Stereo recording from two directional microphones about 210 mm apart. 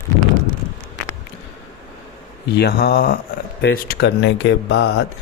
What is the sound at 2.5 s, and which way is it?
Speech, 50° left (ahead or behind).